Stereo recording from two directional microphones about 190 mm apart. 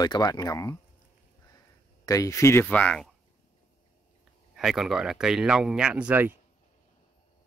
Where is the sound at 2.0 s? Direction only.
15° left (ahead or behind).